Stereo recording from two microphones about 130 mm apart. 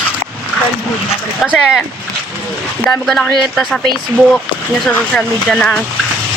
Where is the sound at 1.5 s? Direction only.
5° right (ahead or behind).